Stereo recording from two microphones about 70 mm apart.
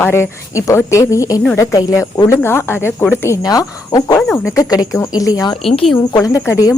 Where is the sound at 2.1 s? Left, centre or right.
Left.